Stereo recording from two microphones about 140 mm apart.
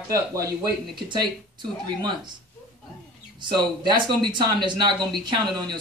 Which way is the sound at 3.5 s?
30° right (ahead or behind).